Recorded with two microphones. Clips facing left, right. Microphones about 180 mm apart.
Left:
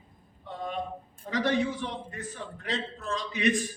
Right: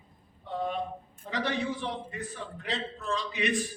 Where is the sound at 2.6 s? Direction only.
45° left (ahead or behind).